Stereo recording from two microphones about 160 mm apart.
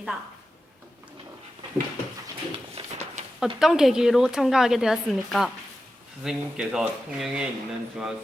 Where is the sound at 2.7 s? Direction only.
45° right (ahead or behind).